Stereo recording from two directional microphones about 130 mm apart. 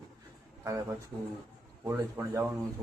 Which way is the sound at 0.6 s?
25° right (ahead or behind).